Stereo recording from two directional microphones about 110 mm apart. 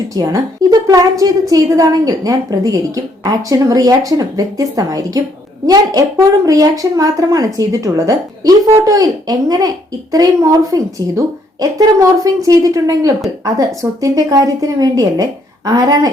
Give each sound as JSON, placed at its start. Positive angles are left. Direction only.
{"t": 0.1, "sound": "a woman's voice", "side_deg": -30}